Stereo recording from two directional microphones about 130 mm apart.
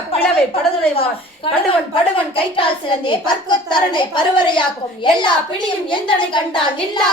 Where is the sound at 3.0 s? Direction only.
35° left (ahead or behind).